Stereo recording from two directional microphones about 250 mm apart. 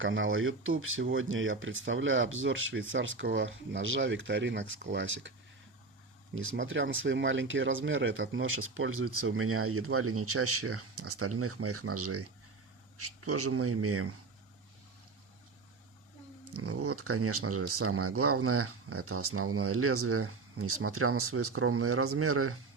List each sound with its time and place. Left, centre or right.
0.0 s speech: right
6.3 s speech: right
16.6 s speech: right